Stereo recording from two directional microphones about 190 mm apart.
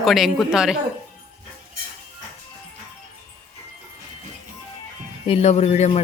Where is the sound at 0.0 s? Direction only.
Centre (ahead or behind).